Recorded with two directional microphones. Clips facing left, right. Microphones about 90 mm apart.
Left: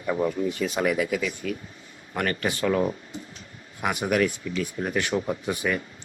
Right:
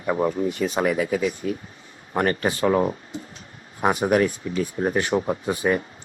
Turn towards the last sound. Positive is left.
turn(degrees=-30)  # may be behind; listen again after turning